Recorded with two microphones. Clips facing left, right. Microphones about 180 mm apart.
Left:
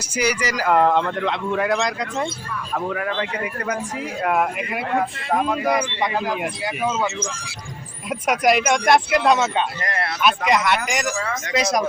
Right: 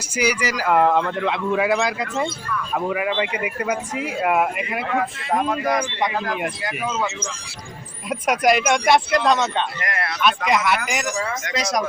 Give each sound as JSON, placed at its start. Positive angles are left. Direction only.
{"t": 0.1, "sound": "a man's voice", "side_deg": -10}
{"t": 9.8, "sound": "speech", "side_deg": 30}
{"t": 10.2, "sound": "a man's voice", "side_deg": 5}